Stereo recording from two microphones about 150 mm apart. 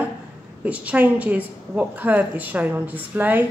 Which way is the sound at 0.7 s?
10° right (ahead or behind).